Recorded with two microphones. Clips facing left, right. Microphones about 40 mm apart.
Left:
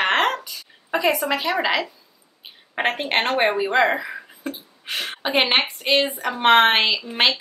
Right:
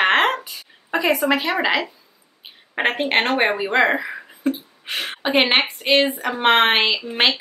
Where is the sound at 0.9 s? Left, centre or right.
Centre.